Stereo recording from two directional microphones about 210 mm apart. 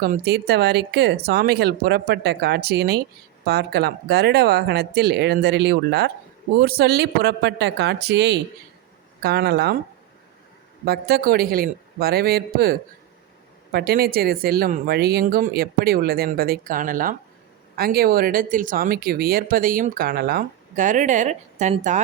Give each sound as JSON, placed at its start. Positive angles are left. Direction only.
{"t": 0.0, "sound": "speech", "side_deg": -45}
{"t": 10.8, "sound": "speech", "side_deg": -50}
{"t": 13.7, "sound": "speech", "side_deg": -45}